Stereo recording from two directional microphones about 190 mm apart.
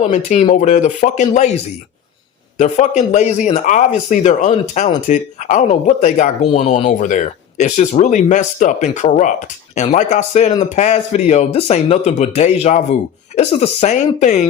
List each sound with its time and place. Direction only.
0.0 s speech: 40° left (ahead or behind)